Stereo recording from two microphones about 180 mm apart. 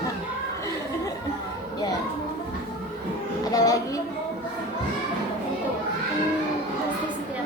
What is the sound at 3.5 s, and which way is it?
Music, 20° left (ahead or behind).